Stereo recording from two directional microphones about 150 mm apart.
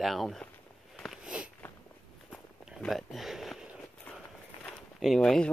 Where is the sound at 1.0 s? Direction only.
5° right (ahead or behind).